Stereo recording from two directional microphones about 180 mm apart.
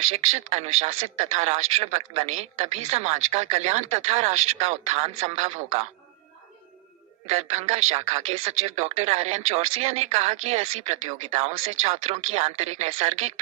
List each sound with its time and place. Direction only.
0.1 s speech: 35° right (ahead or behind)
7.3 s speech: 40° right (ahead or behind)